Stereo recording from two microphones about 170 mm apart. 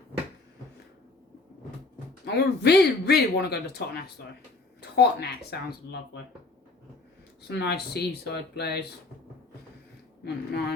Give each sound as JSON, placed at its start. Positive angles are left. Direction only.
{"t": 2.2, "sound": "speech", "side_deg": 75}
{"t": 7.4, "sound": "speech", "side_deg": 80}
{"t": 10.2, "sound": "speech", "side_deg": 75}